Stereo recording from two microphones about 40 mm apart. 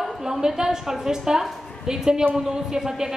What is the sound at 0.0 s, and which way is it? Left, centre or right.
A woman's voice, centre.